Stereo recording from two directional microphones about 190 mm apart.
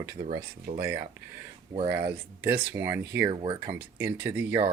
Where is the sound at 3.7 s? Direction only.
10° right (ahead or behind).